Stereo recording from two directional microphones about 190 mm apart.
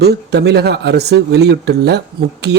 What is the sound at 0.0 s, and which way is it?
Speech, 60° right (ahead or behind).